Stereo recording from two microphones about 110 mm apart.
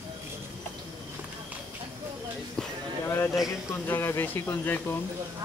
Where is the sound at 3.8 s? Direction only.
20° left (ahead or behind).